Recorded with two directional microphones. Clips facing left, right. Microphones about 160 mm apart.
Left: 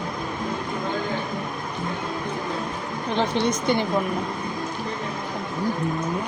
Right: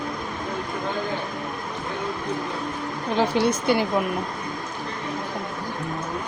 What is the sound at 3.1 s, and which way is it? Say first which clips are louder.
Speech: right 2 dB; 10° right (ahead or behind).